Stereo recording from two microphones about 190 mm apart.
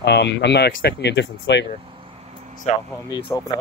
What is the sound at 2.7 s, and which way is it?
Speech, 35° left (ahead or behind).